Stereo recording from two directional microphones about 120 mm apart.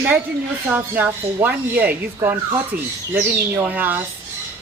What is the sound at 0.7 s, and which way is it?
Speech, 15° right (ahead or behind).